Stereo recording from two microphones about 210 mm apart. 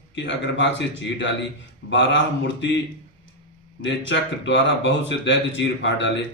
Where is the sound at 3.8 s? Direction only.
60° left (ahead or behind).